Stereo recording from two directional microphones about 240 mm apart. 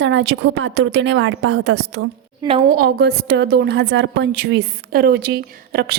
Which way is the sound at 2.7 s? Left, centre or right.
Right.